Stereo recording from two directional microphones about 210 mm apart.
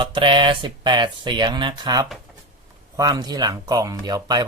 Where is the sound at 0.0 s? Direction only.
25° right (ahead or behind).